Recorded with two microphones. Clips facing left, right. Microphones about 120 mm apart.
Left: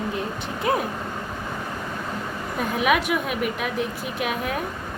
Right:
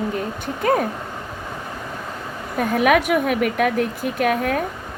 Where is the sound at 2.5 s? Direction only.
50° right (ahead or behind).